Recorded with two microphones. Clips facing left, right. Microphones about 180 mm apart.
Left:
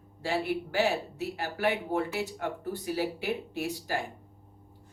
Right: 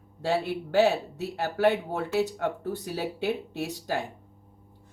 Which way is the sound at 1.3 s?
60° right (ahead or behind).